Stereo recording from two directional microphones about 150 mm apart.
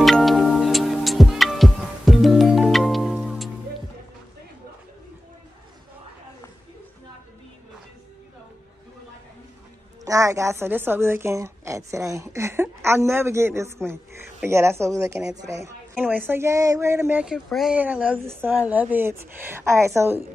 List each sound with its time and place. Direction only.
0.0 s music: centre (ahead or behind)
10.0 s a woman's voice: 20° right (ahead or behind)
17.2 s a woman's voice: 5° right (ahead or behind)